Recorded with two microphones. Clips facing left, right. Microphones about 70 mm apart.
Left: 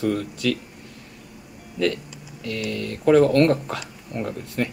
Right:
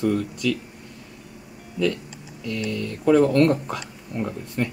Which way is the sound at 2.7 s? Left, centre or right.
Left.